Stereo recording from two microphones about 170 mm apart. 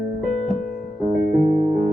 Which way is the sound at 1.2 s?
50° right (ahead or behind).